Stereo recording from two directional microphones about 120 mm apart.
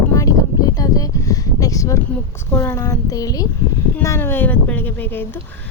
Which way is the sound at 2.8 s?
30° left (ahead or behind).